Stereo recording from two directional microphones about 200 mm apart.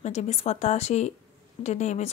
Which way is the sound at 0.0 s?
35° left (ahead or behind).